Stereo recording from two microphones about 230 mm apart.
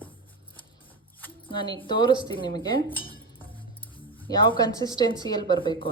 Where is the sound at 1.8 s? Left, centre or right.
Left.